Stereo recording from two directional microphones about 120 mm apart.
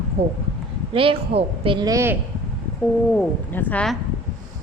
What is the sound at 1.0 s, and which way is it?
Speech, 50° right (ahead or behind).